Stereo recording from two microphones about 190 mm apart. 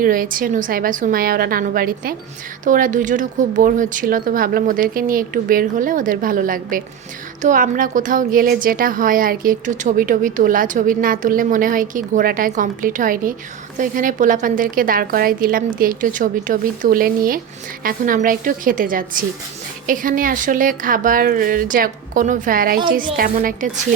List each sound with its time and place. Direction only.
0.0 s a woman's voice: 50° right (ahead or behind)